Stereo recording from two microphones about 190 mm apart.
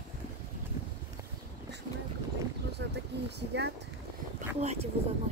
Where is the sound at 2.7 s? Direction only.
60° right (ahead or behind).